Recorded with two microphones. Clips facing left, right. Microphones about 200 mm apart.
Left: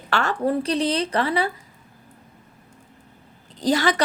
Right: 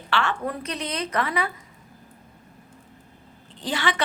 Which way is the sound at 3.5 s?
40° left (ahead or behind).